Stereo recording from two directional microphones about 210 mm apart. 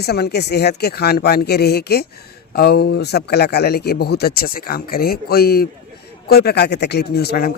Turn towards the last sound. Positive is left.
turn(degrees=45)  # may be behind; listen again after turning